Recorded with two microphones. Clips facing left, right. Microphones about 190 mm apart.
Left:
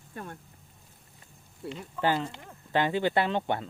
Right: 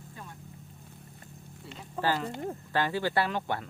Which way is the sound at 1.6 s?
60° left (ahead or behind).